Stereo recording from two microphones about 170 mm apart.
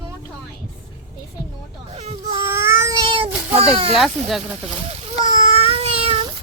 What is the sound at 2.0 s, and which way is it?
Speech, 40° right (ahead or behind).